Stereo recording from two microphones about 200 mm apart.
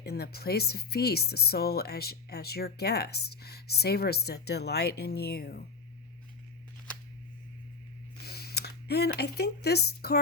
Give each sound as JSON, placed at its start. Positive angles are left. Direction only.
{"t": 0.0, "sound": "speech", "side_deg": 50}
{"t": 8.2, "sound": "a sound", "side_deg": 55}
{"t": 9.1, "sound": "speech", "side_deg": 55}